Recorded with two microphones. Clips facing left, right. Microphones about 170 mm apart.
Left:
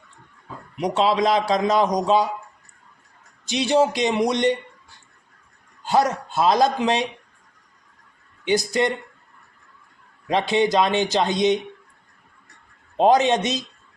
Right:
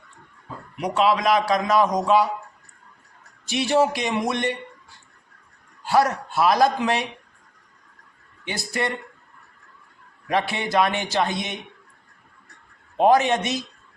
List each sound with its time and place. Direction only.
0.8 s a man's voice: 25° left (ahead or behind)
3.4 s a man's voice: 20° left (ahead or behind)
5.8 s a man's voice: 20° left (ahead or behind)
8.4 s a man's voice: 20° left (ahead or behind)
10.2 s a man's voice: 20° left (ahead or behind)
13.0 s a man's voice: 20° left (ahead or behind)